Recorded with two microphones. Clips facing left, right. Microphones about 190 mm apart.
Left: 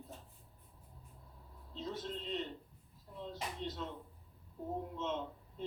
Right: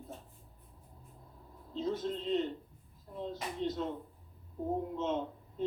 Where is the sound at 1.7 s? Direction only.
50° right (ahead or behind).